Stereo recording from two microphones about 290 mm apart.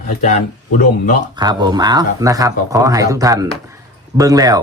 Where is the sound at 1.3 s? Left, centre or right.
Centre.